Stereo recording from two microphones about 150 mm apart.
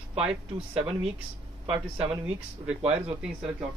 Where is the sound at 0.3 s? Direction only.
40° right (ahead or behind).